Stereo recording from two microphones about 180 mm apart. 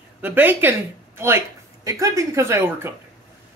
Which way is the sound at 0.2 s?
10° right (ahead or behind).